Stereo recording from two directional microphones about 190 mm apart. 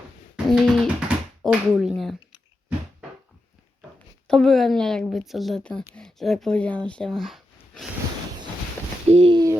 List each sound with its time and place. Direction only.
0.3 s speech: centre (ahead or behind)
4.3 s a woman's voice: centre (ahead or behind)
9.0 s speech: 30° right (ahead or behind)